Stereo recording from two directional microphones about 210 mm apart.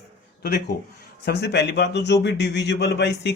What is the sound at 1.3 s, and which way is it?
A man's voice, 55° left (ahead or behind).